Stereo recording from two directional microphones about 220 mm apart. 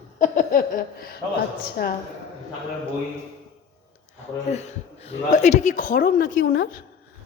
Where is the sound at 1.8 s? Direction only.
45° left (ahead or behind).